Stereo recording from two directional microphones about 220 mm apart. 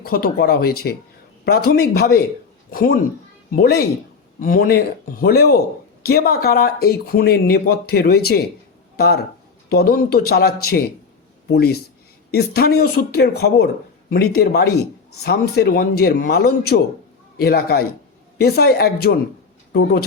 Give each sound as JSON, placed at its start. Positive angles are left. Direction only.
{"t": 0.0, "sound": "speech", "side_deg": 45}